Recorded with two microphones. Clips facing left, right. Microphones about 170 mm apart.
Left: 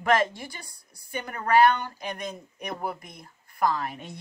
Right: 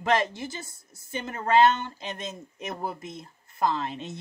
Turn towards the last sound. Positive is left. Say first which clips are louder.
# right 1 dB
turn(degrees=-20)  # may be behind; listen again after turning